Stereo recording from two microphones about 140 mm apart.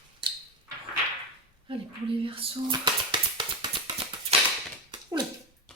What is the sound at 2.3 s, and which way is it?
Music, 35° right (ahead or behind).